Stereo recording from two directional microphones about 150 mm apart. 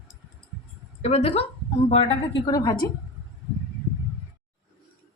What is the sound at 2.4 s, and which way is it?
Speech, 25° left (ahead or behind).